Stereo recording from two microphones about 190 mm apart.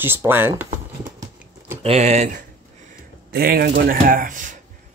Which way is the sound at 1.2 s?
15° right (ahead or behind).